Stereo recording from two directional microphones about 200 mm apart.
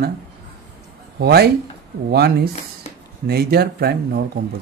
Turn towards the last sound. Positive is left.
turn(degrees=-50)  # may be behind; listen again after turning